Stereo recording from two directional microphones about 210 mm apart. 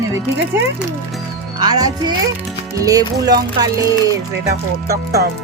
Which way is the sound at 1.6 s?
20° right (ahead or behind).